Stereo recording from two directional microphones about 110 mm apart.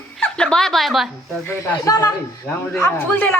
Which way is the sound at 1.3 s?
20° left (ahead or behind).